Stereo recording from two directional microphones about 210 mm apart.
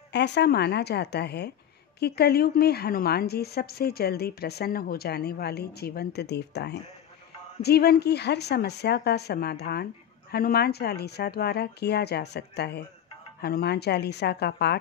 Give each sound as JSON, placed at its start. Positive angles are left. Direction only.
{"t": 0.1, "sound": "a woman's voice", "side_deg": 55}